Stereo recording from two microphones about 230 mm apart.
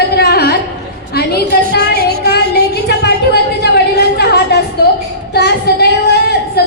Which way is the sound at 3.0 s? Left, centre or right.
Left.